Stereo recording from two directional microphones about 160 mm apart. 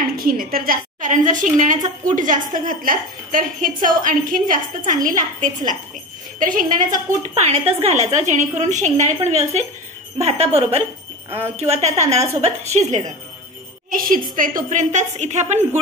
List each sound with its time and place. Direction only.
0.2 s a woman's voice: 65° right (ahead or behind)
7.3 s a woman's voice: 45° right (ahead or behind)
11.2 s speech: 15° right (ahead or behind)
11.6 s a woman's voice: 40° right (ahead or behind)
13.8 s a woman's voice: 60° right (ahead or behind); by 15.8 s 45° right (ahead or behind)